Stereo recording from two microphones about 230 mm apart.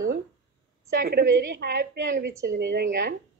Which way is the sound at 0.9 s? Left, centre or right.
Right.